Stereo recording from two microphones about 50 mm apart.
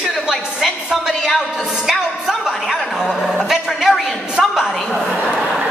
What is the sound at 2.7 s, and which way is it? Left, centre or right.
Music, centre.